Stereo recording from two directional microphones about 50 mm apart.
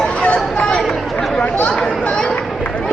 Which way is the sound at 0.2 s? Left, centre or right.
Left.